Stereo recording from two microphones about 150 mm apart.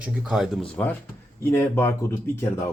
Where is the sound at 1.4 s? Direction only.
15° left (ahead or behind).